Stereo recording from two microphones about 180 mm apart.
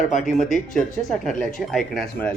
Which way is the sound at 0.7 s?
Centre (ahead or behind).